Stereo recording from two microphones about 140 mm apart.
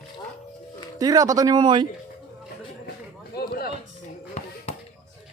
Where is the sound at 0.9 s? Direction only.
25° right (ahead or behind).